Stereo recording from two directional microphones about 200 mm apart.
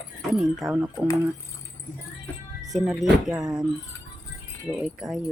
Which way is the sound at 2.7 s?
Centre (ahead or behind).